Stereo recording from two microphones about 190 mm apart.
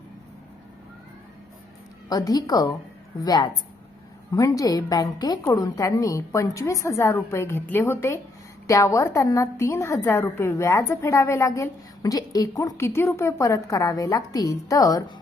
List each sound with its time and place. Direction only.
2.0 s a woman's voice: 20° left (ahead or behind)